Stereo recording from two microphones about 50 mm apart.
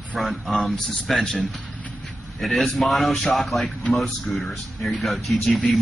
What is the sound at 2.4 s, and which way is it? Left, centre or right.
A man's voice, centre.